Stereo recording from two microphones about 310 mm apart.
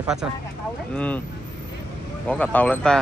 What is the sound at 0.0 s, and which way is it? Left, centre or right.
Speech, centre.